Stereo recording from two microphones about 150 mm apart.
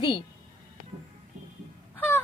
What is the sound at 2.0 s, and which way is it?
Wail, 15° left (ahead or behind).